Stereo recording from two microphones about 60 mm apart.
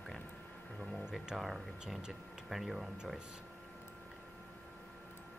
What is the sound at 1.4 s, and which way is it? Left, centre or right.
Speech, centre.